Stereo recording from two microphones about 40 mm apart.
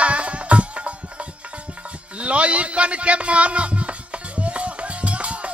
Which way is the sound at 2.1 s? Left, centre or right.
Right.